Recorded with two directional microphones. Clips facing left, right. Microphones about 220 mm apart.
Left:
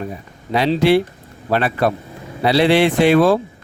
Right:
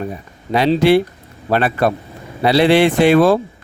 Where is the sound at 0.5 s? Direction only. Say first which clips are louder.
Right 2 dB; 55° right (ahead or behind).